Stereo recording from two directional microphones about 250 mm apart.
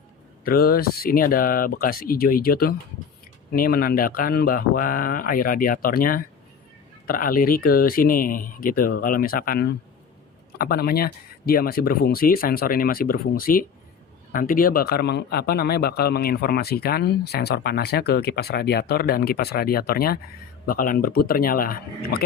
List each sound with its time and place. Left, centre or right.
0.4 s speech: left